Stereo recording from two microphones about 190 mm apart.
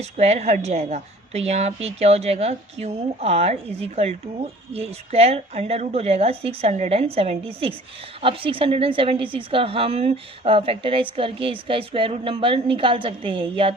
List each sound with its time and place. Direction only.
0.0 s a woman's voice: 35° right (ahead or behind)